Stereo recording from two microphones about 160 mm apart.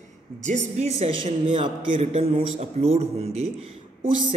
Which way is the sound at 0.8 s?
40° right (ahead or behind).